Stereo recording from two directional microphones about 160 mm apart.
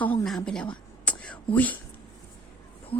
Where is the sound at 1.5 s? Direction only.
10° left (ahead or behind).